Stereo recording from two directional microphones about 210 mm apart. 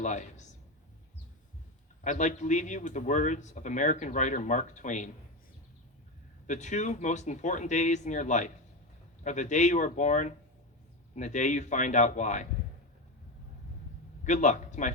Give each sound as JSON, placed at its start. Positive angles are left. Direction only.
{"t": 0.0, "sound": "speech", "side_deg": 35}
{"t": 2.0, "sound": "speech", "side_deg": 35}
{"t": 6.5, "sound": "speech", "side_deg": 35}
{"t": 14.3, "sound": "speech", "side_deg": 35}